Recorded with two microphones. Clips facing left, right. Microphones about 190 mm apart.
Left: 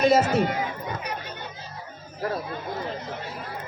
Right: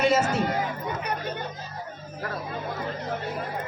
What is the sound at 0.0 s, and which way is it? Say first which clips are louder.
Speech: left 3 dB; 40° left (ahead or behind).